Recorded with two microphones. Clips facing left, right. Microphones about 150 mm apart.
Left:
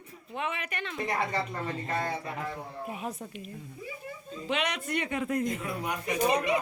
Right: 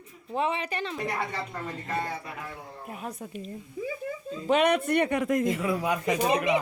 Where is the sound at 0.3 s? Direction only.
30° right (ahead or behind).